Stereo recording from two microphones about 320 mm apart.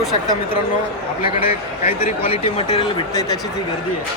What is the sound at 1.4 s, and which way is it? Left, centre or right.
Speech, centre.